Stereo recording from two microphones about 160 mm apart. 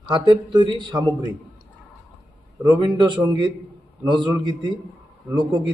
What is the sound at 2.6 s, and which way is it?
Speech, 25° right (ahead or behind).